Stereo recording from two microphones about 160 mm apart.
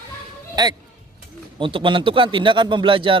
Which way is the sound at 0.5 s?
25° right (ahead or behind).